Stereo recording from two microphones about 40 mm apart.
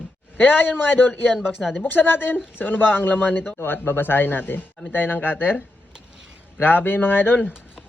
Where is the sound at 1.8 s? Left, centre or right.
Left.